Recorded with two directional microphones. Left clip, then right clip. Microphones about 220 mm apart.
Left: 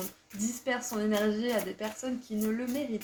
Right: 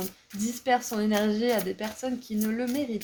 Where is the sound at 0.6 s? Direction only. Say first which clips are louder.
Right 7 dB; 50° right (ahead or behind).